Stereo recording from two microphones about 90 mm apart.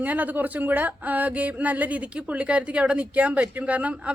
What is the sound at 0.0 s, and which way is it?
Speech, 20° right (ahead or behind).